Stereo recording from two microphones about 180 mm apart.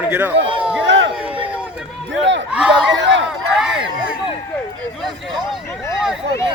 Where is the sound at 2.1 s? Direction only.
90° right.